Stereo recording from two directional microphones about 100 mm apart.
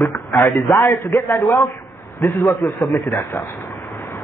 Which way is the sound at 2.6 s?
Centre (ahead or behind).